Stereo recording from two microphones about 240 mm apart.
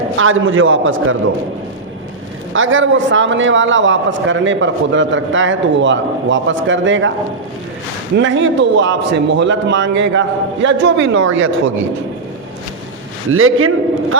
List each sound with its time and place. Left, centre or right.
0.2 s a man's voice: right
2.5 s a man's voice: right
8.1 s a man's voice: right
13.3 s a man's voice: right